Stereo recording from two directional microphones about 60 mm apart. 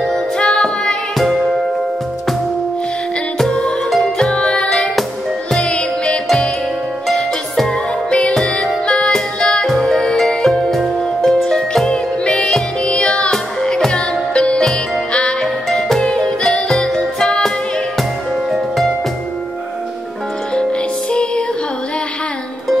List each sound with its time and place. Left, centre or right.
0.4 s music: centre
3.3 s music: centre
15.4 s music: centre
16.0 s music: centre
16.4 s music: centre
21.1 s music: centre